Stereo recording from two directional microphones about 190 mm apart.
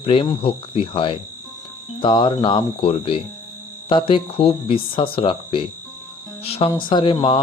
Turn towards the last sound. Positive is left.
turn(degrees=25)  # may be behind; listen again after turning